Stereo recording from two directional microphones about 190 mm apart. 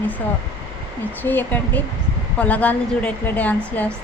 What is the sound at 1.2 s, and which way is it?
A woman's voice, 10° left (ahead or behind).